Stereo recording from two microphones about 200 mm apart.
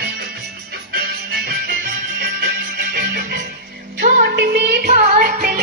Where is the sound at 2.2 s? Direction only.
50° right (ahead or behind).